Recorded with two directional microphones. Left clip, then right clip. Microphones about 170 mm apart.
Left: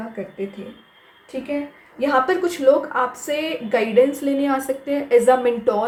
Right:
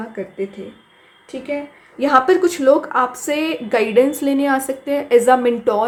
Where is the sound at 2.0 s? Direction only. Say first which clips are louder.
Right 5 dB; 45° right (ahead or behind).